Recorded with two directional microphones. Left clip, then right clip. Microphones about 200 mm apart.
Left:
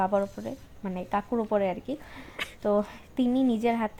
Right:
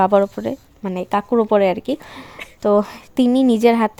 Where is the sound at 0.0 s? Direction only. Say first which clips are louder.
Right 12 dB; 55° right (ahead or behind).